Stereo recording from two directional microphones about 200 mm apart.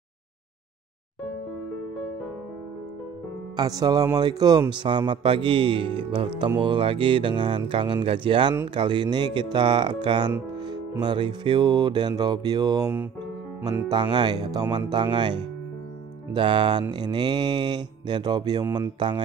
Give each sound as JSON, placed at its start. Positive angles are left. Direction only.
{"t": 3.5, "sound": "a man's voice", "side_deg": -20}
{"t": 10.7, "sound": "music", "side_deg": -20}
{"t": 12.2, "sound": "a man's voice", "side_deg": -20}